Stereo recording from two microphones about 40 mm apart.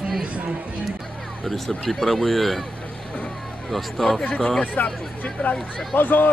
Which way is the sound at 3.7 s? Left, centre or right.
Centre.